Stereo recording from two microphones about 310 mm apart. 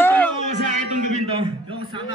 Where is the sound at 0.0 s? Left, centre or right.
Centre.